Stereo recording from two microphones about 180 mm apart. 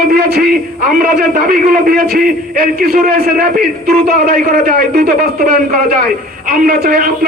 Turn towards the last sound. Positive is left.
turn(degrees=-60)  # may be behind; listen again after turning